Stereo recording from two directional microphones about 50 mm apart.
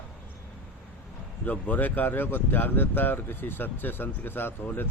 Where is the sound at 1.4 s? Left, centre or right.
Left.